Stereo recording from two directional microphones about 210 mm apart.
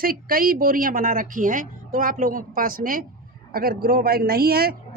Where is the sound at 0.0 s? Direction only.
45° right (ahead or behind).